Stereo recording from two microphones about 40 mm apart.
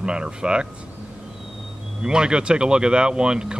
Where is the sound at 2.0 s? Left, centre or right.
Centre.